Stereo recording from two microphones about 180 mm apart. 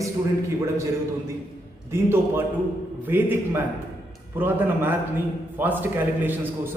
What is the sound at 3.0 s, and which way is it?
A man's voice, 10° right (ahead or behind).